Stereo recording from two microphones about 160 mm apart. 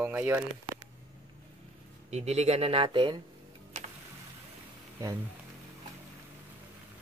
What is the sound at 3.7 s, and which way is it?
Tick, 50° right (ahead or behind).